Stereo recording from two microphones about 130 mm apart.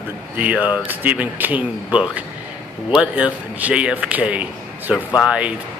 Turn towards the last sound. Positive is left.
turn(degrees=-5)  # may be behind; listen again after turning